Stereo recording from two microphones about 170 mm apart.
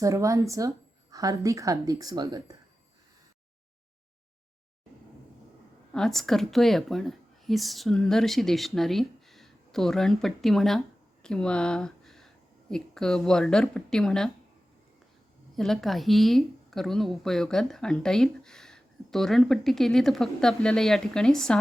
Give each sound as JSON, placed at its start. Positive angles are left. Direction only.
{"t": 0.0, "sound": "a woman's voice", "side_deg": -20}
{"t": 5.9, "sound": "a woman's voice", "side_deg": 5}
{"t": 15.5, "sound": "a woman's voice", "side_deg": 0}